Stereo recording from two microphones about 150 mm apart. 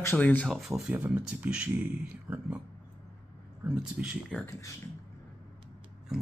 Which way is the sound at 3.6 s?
10° right (ahead or behind).